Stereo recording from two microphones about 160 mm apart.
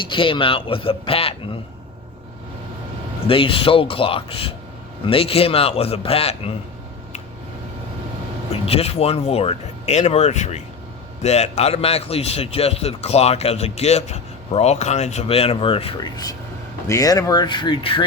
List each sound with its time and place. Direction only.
0.1 s a man's voice: 35° left (ahead or behind)
3.2 s a man's voice: 35° left (ahead or behind)
8.6 s a man's voice: 40° left (ahead or behind)